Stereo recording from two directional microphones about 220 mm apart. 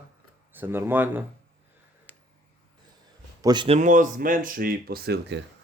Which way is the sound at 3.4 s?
20° right (ahead or behind).